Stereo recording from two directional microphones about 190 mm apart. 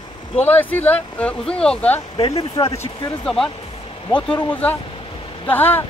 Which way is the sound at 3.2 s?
Centre (ahead or behind).